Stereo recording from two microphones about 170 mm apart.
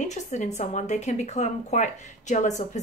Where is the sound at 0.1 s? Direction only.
45° left (ahead or behind).